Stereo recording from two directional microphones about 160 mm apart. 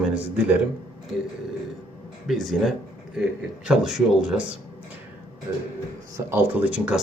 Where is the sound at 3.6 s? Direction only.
5° right (ahead or behind).